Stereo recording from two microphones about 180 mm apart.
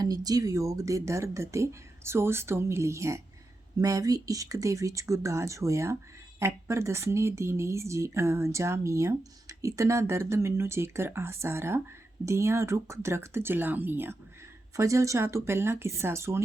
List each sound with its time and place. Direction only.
0.0 s speech: 20° right (ahead or behind)